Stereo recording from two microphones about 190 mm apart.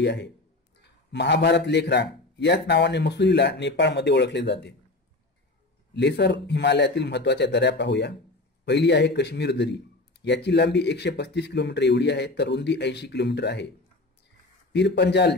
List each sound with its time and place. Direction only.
0.0 s speech: 65° left (ahead or behind)
5.9 s speech: 65° left (ahead or behind)
14.7 s speech: 65° left (ahead or behind)